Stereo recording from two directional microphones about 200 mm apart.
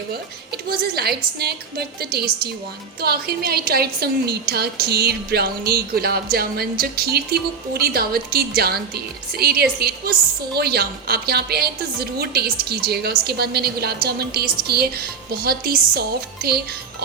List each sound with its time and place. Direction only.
0.1 s a woman's voice: 50° right (ahead or behind)